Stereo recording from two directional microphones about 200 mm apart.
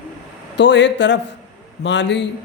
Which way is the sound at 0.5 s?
60° left (ahead or behind).